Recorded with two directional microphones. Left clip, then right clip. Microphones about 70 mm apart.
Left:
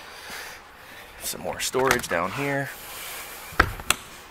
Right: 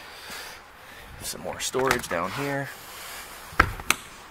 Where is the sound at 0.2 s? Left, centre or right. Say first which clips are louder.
Left 2 dB; centre.